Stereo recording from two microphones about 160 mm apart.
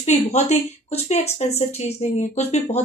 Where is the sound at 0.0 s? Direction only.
45° left (ahead or behind).